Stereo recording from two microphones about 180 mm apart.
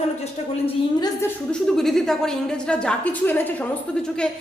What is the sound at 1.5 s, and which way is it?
A woman's voice, centre (ahead or behind).